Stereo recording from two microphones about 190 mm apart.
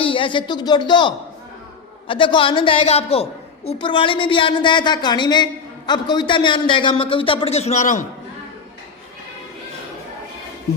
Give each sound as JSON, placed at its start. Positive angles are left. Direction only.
{"t": 0.0, "sound": "a woman's voice", "side_deg": 25}